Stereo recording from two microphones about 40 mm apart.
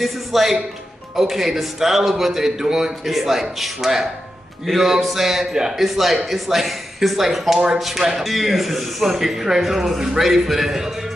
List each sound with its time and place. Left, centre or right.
0.0 s a man's voice: centre
7.5 s speech: right
7.8 s speech: centre